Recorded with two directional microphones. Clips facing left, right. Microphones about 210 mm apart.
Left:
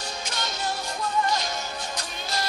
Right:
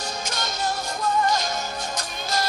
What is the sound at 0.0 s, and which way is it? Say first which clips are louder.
Music: right 3 dB; 45° right (ahead or behind).